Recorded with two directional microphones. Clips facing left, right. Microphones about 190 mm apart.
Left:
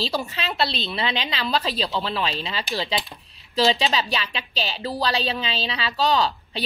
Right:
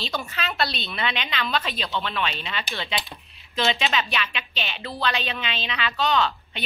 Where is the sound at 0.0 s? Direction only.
35° left (ahead or behind).